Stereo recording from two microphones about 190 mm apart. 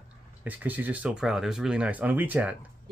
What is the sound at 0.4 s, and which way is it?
Speech, 10° right (ahead or behind).